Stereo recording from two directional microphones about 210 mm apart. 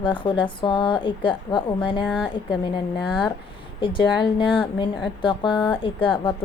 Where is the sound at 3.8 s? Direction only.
20° left (ahead or behind).